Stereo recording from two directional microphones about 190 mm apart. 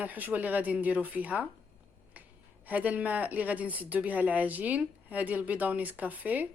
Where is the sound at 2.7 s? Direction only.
10° right (ahead or behind).